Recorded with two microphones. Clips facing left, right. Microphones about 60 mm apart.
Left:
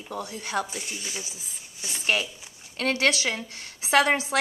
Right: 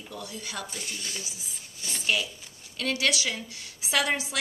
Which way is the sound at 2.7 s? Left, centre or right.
Left.